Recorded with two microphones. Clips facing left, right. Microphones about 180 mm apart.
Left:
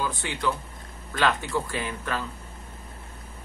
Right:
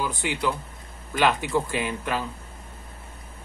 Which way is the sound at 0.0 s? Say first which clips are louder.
Right 2 dB; 15° right (ahead or behind).